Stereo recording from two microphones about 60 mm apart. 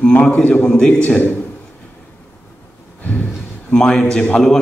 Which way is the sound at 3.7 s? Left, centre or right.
Centre.